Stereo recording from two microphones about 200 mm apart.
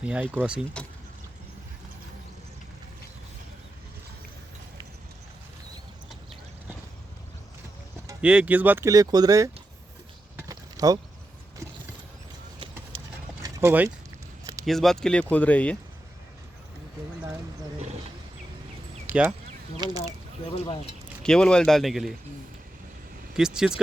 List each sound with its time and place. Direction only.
0.0 s speech: 5° right (ahead or behind)
8.2 s speech: 5° right (ahead or behind)
10.3 s a sound: 20° right (ahead or behind)
13.4 s dog: 10° right (ahead or behind)
14.6 s speech: centre (ahead or behind)
19.0 s a sound: 10° right (ahead or behind)
19.8 s speech: 20° right (ahead or behind)
21.2 s speech: 5° left (ahead or behind)
23.3 s speech: 5° right (ahead or behind)